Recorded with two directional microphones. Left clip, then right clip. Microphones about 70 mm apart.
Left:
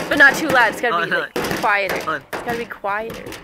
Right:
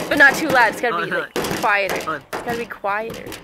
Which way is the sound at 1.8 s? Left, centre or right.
Right.